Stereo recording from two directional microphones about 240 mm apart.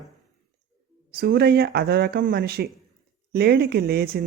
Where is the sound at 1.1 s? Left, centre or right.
Right.